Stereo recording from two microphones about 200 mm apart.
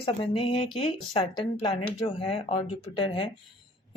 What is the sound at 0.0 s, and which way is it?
Speech, 25° left (ahead or behind).